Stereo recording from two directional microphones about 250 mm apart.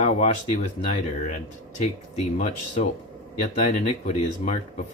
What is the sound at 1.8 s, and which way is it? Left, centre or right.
Speech, left.